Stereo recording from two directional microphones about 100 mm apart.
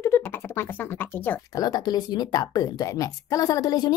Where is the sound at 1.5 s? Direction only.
40° left (ahead or behind).